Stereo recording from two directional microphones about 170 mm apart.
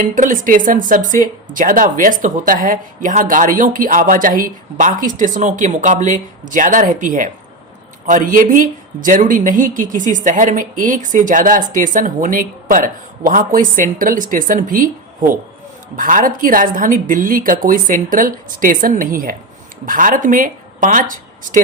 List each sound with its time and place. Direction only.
0.0 s speech: 50° right (ahead or behind)